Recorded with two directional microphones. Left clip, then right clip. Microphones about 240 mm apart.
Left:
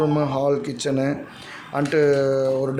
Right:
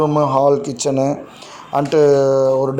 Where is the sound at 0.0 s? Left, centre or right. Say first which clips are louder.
Right 7 dB; centre.